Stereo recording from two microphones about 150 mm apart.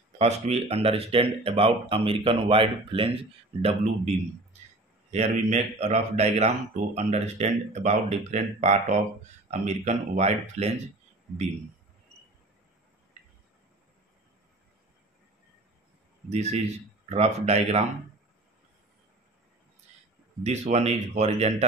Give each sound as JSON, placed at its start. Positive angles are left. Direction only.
{"t": 0.2, "sound": "speech", "side_deg": -45}
{"t": 5.1, "sound": "speech", "side_deg": -50}
{"t": 16.3, "sound": "speech", "side_deg": -45}
{"t": 20.4, "sound": "speech", "side_deg": -50}